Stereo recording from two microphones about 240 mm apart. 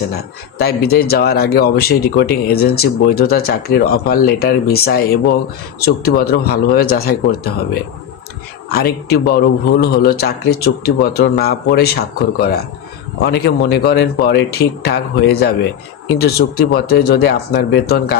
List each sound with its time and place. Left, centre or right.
0.6 s speech: left